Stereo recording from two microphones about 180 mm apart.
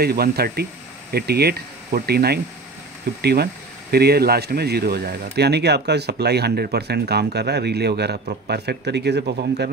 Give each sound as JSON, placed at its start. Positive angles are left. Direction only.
{"t": 0.0, "sound": "speech", "side_deg": -60}